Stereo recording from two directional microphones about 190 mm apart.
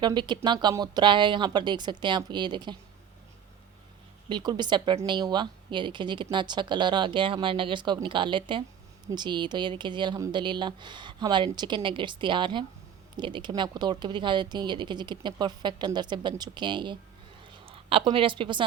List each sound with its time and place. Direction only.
0.0 s a woman's voice: 25° right (ahead or behind)
4.3 s a woman's voice: 25° right (ahead or behind)